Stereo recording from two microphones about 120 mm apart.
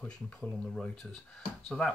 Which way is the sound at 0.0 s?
10° left (ahead or behind).